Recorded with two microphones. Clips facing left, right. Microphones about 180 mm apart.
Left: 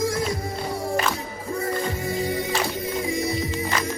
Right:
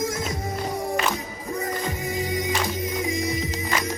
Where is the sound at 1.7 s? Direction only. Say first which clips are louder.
Left 2 dB; 15° right (ahead or behind).